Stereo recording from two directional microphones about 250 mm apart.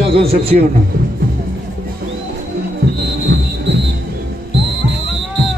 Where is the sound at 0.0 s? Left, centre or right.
Right.